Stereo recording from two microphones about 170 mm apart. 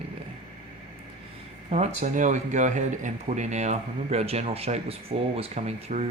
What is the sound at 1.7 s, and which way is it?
Speech, 45° right (ahead or behind).